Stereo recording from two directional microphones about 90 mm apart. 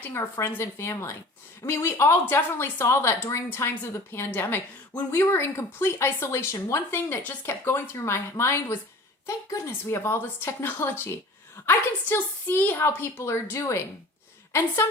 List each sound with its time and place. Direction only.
0.1 s a woman's voice: 30° left (ahead or behind)
6.9 s a woman's voice: 20° left (ahead or behind)